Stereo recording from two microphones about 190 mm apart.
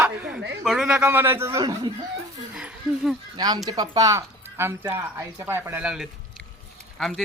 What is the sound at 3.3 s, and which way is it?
A man's voice, 20° right (ahead or behind).